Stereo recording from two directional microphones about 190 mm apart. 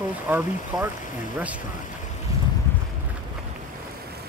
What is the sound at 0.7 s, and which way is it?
Speech, 20° right (ahead or behind).